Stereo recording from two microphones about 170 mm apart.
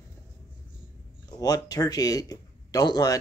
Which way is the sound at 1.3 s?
20° left (ahead or behind).